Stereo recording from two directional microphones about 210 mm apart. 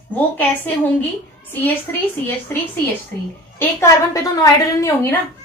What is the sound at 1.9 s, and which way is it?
A woman's voice, 10° left (ahead or behind).